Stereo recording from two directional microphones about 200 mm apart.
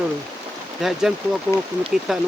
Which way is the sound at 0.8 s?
Centre (ahead or behind).